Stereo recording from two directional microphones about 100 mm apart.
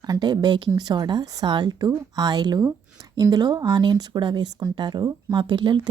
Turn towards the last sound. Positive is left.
turn(degrees=-50)  # may be behind; listen again after turning